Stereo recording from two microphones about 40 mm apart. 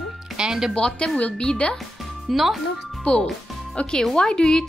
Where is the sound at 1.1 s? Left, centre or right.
Left.